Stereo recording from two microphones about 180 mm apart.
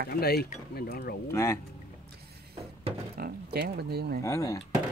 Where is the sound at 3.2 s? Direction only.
55° right (ahead or behind).